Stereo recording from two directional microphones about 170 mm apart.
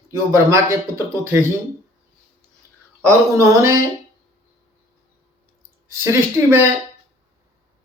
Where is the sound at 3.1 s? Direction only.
15° right (ahead or behind).